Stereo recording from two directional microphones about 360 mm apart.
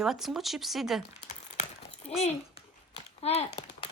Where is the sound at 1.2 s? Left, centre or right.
Centre.